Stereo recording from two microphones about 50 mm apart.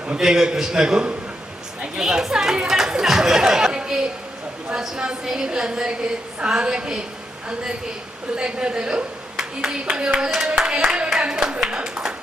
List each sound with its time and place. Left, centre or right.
0.1 s speech: centre
1.8 s chatter: centre
5.2 s speech: centre
8.4 s speech: centre
10.7 s clapping: centre